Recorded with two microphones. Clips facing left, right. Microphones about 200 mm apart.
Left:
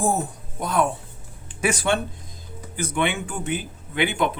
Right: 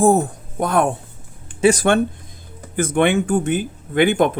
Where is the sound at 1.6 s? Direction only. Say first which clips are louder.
Right 8 dB; 40° right (ahead or behind).